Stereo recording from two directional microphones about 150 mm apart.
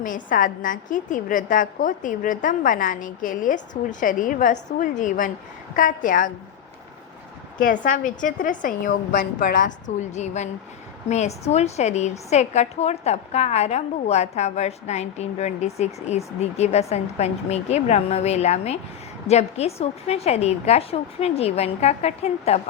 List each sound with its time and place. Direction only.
0.0 s a woman's voice: 60° left (ahead or behind)
7.6 s a woman's voice: 60° left (ahead or behind); by 22.6 s 45° left (ahead or behind)